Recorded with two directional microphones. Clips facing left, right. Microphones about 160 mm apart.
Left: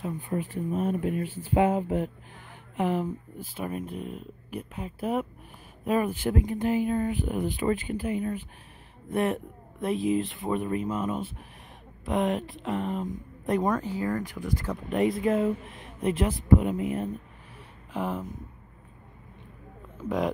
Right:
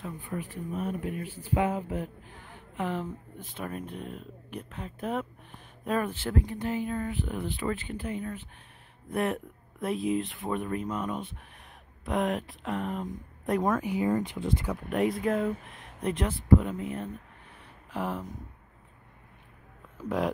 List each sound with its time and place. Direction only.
0.0 s speech: 25° left (ahead or behind)
2.8 s speech: 10° left (ahead or behind)
9.1 s speech: centre (ahead or behind)
13.8 s speech: 20° right (ahead or behind)
14.7 s speech: centre (ahead or behind)
16.3 s speech: 15° left (ahead or behind)
17.9 s speech: centre (ahead or behind)